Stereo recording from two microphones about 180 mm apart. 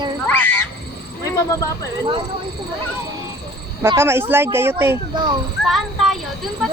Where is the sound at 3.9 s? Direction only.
15° right (ahead or behind).